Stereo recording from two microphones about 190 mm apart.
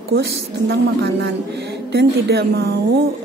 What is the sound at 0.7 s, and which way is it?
A woman's voice, 65° right (ahead or behind).